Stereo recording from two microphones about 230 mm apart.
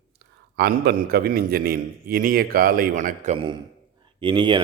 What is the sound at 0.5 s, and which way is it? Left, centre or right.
A man's voice, right.